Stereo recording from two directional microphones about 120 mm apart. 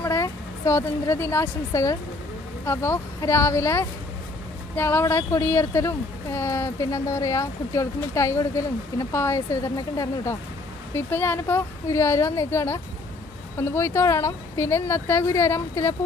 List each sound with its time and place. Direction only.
0.0 s a sound: 25° left (ahead or behind)
1.4 s speech: 25° left (ahead or behind)
10.9 s speech: 20° left (ahead or behind)